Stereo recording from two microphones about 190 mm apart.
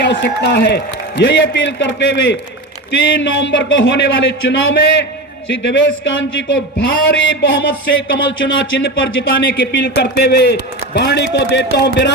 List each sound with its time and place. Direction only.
0.0 s a man's voice: 65° left (ahead or behind)
7.1 s speech: 90° left
9.6 s a man's voice: 60° left (ahead or behind)